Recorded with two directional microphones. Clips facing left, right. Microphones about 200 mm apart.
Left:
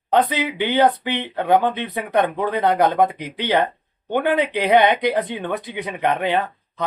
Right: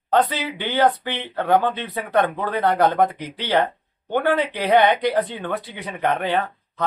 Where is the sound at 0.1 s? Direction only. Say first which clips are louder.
Left 1 dB; 15° left (ahead or behind).